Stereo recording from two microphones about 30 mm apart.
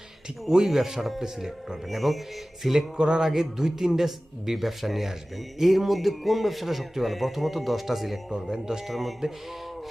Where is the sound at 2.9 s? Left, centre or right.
Right.